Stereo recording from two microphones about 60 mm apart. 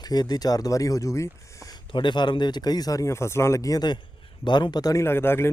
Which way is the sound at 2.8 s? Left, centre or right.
Left.